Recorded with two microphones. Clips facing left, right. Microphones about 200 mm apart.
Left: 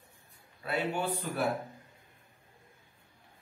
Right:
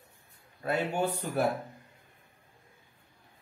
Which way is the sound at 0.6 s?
45° right (ahead or behind).